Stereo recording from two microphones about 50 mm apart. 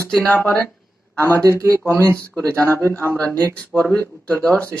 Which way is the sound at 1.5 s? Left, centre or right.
Right.